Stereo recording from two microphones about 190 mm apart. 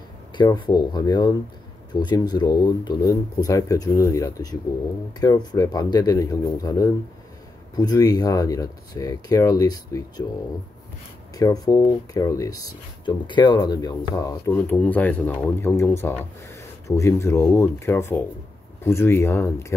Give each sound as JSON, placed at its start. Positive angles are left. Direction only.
{"t": 0.4, "sound": "speech", "side_deg": 25}
{"t": 11.3, "sound": "speech", "side_deg": 20}